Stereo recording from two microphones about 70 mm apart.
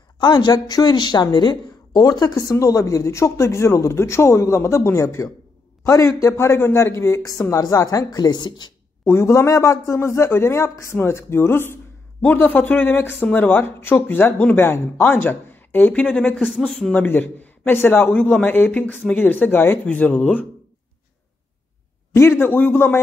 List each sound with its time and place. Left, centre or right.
0.2 s speech: left
2.5 s a man's voice: left
7.6 s speech: left
9.0 s a man's voice: left
16.3 s a man's voice: centre
16.9 s speech: left
22.1 s a man's voice: left